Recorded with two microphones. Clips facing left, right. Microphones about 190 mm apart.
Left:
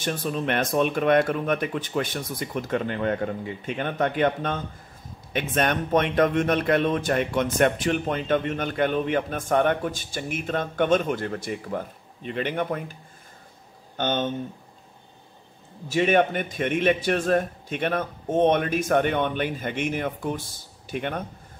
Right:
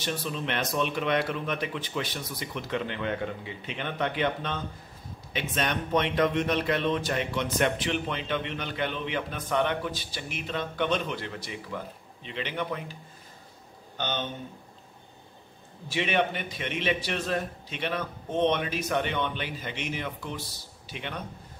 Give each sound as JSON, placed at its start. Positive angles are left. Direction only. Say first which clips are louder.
{"t": 0.0, "sound": "a man's voice", "louder": "left 5 dB", "side_deg": 50}
{"t": 13.9, "sound": "a man's voice", "louder": "left 7 dB", "side_deg": 50}
{"t": 15.9, "sound": "a man's voice", "louder": "left 7 dB", "side_deg": 45}